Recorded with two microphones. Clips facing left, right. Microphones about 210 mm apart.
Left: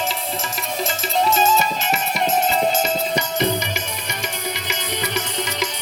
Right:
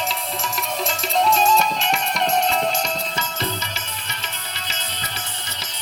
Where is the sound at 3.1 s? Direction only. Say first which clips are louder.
Left 7 dB; 15° left (ahead or behind).